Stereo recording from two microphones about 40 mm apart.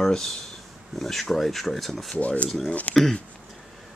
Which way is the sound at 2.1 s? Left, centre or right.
Left.